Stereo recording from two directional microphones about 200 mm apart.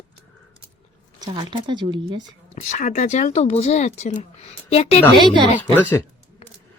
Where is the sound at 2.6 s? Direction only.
40° left (ahead or behind).